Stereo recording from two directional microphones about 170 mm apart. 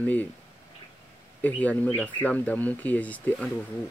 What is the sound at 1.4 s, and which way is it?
Speech, 10° left (ahead or behind).